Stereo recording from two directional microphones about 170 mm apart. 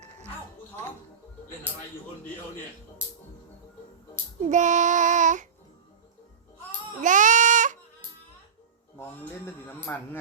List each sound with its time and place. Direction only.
4.4 s child singing: 45° right (ahead or behind)
7.0 s baby cry: 50° right (ahead or behind)
9.0 s speech: 15° left (ahead or behind)